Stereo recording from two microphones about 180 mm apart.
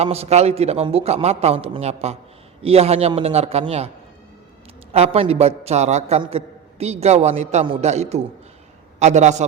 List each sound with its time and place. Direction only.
0.0 s a man's voice: 35° right (ahead or behind)
4.9 s a man's voice: 35° right (ahead or behind)